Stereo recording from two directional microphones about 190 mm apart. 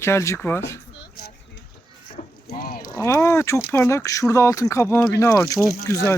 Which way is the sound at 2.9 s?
15° left (ahead or behind).